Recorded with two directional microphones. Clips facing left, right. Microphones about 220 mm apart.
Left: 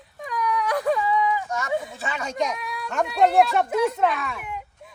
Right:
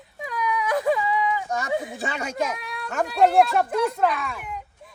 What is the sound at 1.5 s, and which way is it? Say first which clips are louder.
Speech: right 1 dB; 35° right (ahead or behind).